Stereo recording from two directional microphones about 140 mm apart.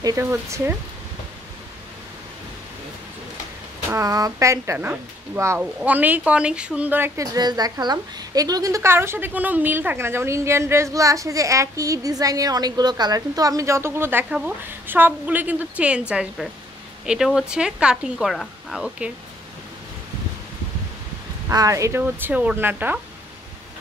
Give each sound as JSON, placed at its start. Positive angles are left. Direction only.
{"t": 0.0, "sound": "a woman's voice", "side_deg": -20}
{"t": 3.9, "sound": "a woman's voice", "side_deg": -25}
{"t": 7.2, "sound": "a woman's voice", "side_deg": -30}
{"t": 21.5, "sound": "a woman's voice", "side_deg": -25}